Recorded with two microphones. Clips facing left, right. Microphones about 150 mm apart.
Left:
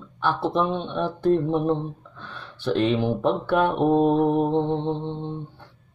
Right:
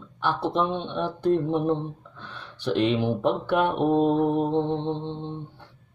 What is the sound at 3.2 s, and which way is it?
Speech, 15° right (ahead or behind).